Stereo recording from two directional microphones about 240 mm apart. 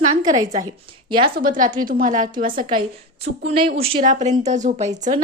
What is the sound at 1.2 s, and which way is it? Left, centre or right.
A woman's voice, right.